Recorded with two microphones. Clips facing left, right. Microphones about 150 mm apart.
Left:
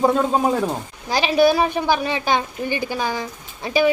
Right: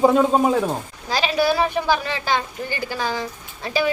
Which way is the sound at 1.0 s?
20° left (ahead or behind).